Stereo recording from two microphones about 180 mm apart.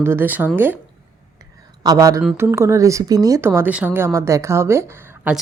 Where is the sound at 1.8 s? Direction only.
20° right (ahead or behind).